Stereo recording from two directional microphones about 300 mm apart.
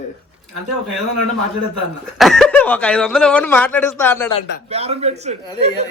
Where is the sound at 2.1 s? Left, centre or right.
Centre.